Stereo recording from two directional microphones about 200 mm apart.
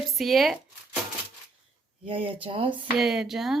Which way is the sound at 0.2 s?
Centre (ahead or behind).